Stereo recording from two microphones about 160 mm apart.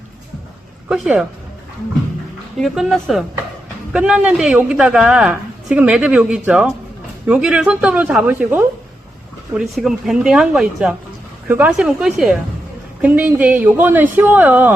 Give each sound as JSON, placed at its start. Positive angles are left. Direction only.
{"t": 0.9, "sound": "a woman's voice", "side_deg": -5}
{"t": 2.6, "sound": "a woman's voice", "side_deg": 0}
{"t": 9.6, "sound": "a woman's voice", "side_deg": 0}